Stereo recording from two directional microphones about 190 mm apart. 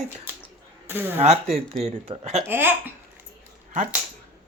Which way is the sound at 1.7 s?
35° right (ahead or behind).